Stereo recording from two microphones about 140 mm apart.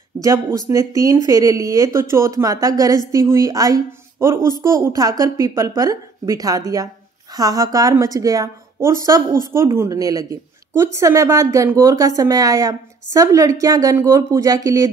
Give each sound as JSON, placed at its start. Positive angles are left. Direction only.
{"t": 0.2, "sound": "a woman's voice", "side_deg": -25}